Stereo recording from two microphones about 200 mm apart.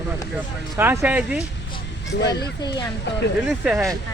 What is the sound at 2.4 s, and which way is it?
Speech, 20° left (ahead or behind).